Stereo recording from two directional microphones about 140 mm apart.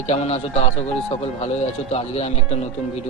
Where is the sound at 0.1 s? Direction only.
50° left (ahead or behind).